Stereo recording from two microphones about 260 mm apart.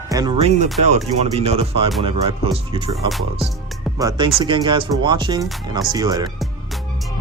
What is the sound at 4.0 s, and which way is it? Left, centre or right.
Speech, centre.